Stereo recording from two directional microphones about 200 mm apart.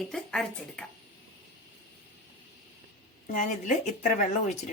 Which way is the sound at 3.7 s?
35° left (ahead or behind).